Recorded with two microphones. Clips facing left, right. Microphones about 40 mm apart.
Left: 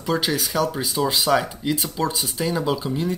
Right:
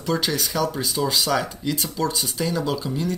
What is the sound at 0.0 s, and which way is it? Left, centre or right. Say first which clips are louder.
Speech: left 1 dB; centre.